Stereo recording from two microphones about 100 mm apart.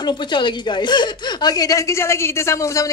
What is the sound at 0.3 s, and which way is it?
A woman's voice, 50° left (ahead or behind).